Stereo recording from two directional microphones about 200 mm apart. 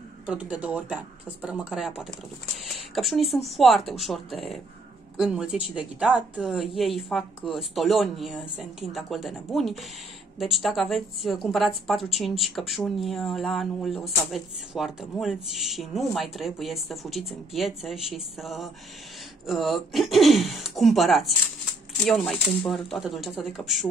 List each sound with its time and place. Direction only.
0.3 s a woman's voice: 5° right (ahead or behind)